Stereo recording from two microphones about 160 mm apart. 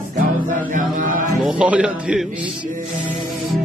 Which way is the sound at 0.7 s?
55° right (ahead or behind).